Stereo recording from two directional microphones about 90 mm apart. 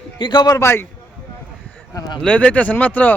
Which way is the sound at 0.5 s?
30° left (ahead or behind).